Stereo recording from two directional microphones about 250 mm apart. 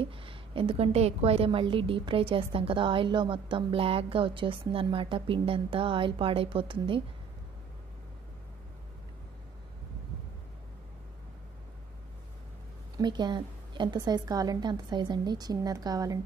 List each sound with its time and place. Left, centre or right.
0.0 s a woman's voice: right
12.9 s a woman's voice: centre